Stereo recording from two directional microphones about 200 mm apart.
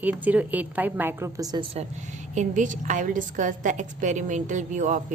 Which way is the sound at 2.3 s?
40° right (ahead or behind).